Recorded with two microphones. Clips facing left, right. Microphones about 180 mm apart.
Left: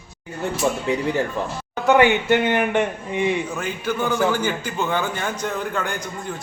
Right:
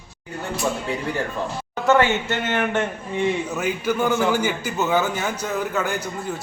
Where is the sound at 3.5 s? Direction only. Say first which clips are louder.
Right 2 dB; 10° right (ahead or behind).